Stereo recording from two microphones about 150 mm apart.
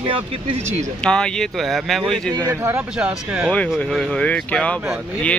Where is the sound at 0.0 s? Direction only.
35° right (ahead or behind).